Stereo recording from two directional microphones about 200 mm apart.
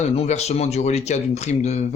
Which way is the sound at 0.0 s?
30° left (ahead or behind).